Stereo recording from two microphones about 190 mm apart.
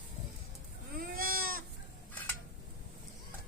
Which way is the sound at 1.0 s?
50° right (ahead or behind).